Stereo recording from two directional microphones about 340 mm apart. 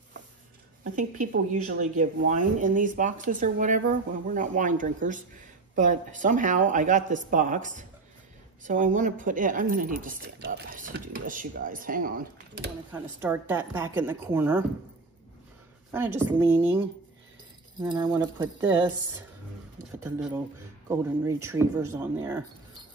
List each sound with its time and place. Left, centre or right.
0.9 s speech: right
12.9 s a woman's voice: centre
15.9 s speech: centre
17.7 s speech: centre
20.0 s a woman's voice: centre